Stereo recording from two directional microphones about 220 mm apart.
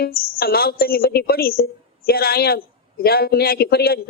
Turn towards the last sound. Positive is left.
turn(degrees=45)  # may be behind; listen again after turning